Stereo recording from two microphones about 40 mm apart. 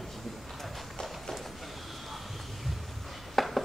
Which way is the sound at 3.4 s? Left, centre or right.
Centre.